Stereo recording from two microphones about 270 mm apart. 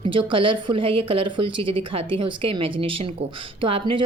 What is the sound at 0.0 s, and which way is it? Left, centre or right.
A woman's voice, centre.